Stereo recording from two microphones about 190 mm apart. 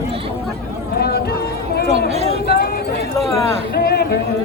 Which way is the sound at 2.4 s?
55° left (ahead or behind).